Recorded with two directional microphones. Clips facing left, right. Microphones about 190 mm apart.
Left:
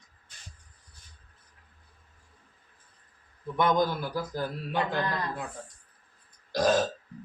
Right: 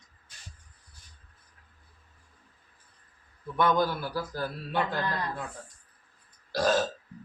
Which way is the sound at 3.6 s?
15° left (ahead or behind).